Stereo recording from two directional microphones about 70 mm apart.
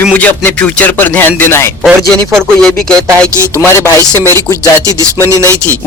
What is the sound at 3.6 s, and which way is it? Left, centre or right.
Speech, left.